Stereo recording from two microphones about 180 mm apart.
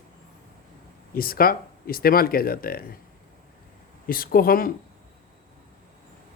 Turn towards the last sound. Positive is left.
turn(degrees=55)  # may be behind; listen again after turning